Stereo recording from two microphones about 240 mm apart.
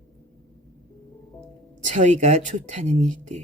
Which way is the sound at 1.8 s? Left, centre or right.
Right.